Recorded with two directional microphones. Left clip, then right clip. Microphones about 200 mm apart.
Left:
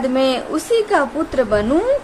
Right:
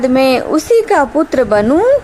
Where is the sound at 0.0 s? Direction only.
30° right (ahead or behind).